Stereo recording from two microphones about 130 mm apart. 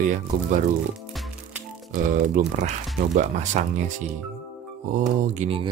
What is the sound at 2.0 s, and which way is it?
Speech, 75° right (ahead or behind).